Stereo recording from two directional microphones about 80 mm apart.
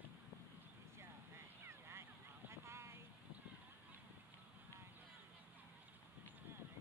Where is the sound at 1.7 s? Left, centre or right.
Right.